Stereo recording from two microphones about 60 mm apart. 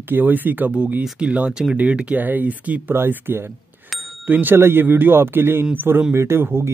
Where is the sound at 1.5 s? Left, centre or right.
Centre.